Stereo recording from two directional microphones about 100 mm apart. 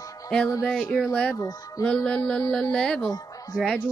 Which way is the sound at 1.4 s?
35° left (ahead or behind).